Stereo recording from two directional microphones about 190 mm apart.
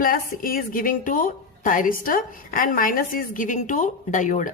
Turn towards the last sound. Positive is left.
turn(degrees=40)  # may be behind; listen again after turning